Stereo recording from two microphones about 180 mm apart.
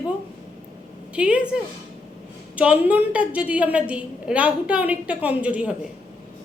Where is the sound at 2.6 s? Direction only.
5° right (ahead or behind).